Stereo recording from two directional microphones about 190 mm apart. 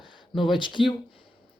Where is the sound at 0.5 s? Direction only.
25° left (ahead or behind).